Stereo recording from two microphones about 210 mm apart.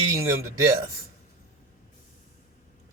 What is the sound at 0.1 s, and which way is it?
Speech, 15° right (ahead or behind).